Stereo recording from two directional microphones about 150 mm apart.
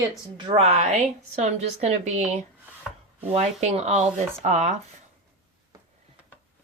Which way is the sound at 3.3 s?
45° right (ahead or behind).